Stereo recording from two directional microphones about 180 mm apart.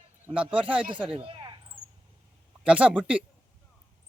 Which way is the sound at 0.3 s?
5° right (ahead or behind).